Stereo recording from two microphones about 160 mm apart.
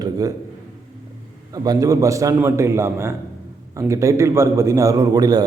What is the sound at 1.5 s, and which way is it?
A man's voice, 25° right (ahead or behind).